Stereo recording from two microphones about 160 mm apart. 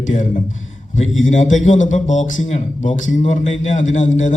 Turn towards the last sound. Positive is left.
turn(degrees=50)  # may be behind; listen again after turning